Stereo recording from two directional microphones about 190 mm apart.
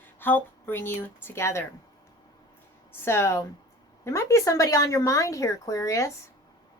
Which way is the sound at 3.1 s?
15° left (ahead or behind).